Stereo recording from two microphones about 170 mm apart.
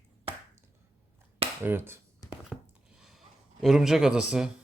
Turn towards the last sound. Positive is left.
turn(degrees=-5)  # may be behind; listen again after turning